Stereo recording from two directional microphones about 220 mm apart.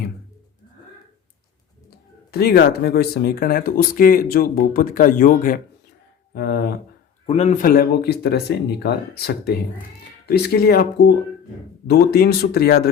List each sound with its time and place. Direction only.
2.3 s speech: 45° left (ahead or behind)
7.3 s speech: 30° left (ahead or behind); by 12.9 s 45° left (ahead or behind)